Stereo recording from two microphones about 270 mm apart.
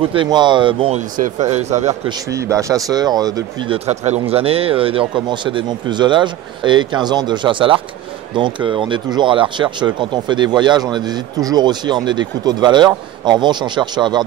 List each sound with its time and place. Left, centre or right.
0.1 s speech: centre
2.3 s speech: centre